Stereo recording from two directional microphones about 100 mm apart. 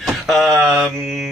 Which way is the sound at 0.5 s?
20° right (ahead or behind).